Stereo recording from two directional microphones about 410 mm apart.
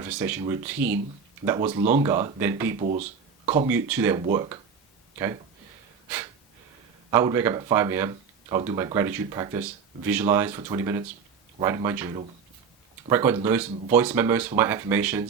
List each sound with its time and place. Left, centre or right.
0.0 s speech: centre
2.8 s speech: centre
3.7 s speech: centre
7.1 s speech: centre